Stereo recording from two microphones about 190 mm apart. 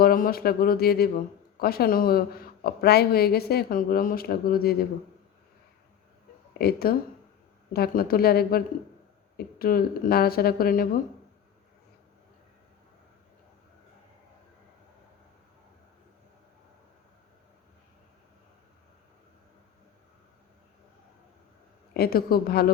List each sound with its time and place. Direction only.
0.0 s speech: 50° left (ahead or behind)
6.6 s speech: 55° left (ahead or behind)
21.9 s speech: 55° left (ahead or behind)